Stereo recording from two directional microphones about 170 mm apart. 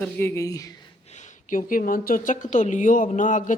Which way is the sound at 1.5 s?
55° left (ahead or behind).